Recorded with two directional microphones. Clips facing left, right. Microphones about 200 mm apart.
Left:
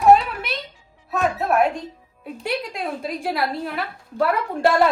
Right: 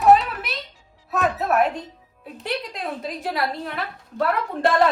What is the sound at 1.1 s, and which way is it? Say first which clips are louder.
A woman's voice: left 1 dB; centre (ahead or behind).